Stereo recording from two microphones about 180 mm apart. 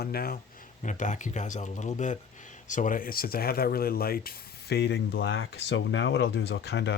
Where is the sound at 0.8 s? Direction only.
45° left (ahead or behind).